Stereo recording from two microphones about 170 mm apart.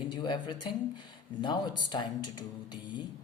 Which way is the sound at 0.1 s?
25° left (ahead or behind).